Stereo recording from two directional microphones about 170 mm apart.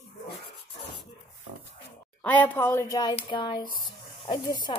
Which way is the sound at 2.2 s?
10° left (ahead or behind).